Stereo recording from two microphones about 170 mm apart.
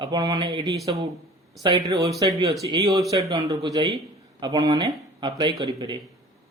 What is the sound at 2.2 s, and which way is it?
Speech, 30° right (ahead or behind).